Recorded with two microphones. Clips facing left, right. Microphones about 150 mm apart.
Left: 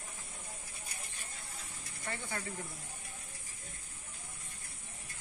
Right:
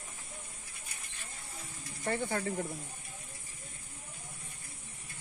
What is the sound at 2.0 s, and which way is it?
Speech, 50° right (ahead or behind).